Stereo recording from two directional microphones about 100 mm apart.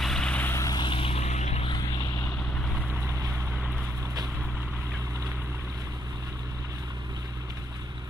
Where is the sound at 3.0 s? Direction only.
30° right (ahead or behind).